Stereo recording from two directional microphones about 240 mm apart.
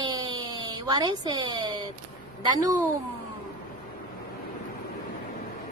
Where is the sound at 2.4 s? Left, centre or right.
Centre.